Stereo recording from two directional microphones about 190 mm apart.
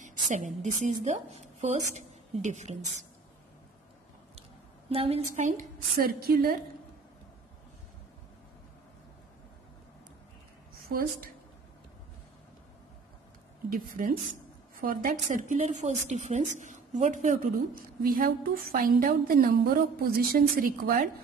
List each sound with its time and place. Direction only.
0.0 s a sound: 40° right (ahead or behind)
0.6 s a woman's voice: 40° right (ahead or behind)
4.4 s a sound: 30° right (ahead or behind)
5.9 s a woman's voice: 55° right (ahead or behind)
10.9 s a woman's voice: 50° right (ahead or behind)
13.7 s a woman's voice: 45° right (ahead or behind)